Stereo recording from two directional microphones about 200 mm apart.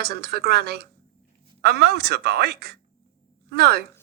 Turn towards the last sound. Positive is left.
turn(degrees=-50)  # may be behind; listen again after turning